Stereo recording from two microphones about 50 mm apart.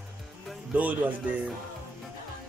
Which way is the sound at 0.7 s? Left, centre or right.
Right.